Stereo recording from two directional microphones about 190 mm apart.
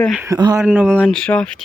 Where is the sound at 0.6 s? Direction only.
5° right (ahead or behind).